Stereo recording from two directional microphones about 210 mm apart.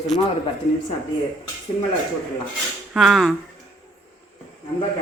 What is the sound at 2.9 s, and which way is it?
Speech, centre (ahead or behind).